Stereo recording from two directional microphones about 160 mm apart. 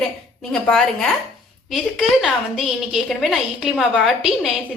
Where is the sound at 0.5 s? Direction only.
5° left (ahead or behind).